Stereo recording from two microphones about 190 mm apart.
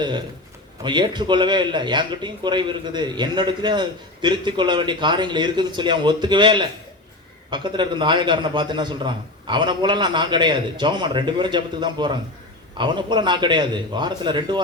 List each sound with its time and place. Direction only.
0.0 s a man's voice: 25° right (ahead or behind)